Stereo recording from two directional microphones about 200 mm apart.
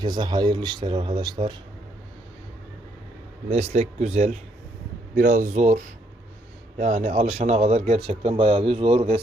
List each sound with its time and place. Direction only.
0.0 s speech: 20° right (ahead or behind)
3.5 s a man's voice: 30° right (ahead or behind)
5.1 s a man's voice: 45° right (ahead or behind); by 9.2 s 30° right (ahead or behind)